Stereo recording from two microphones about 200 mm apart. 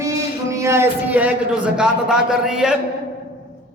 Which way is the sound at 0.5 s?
15° right (ahead or behind).